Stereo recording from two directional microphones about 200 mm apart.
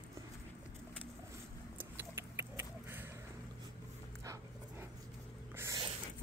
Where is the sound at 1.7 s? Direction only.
10° right (ahead or behind).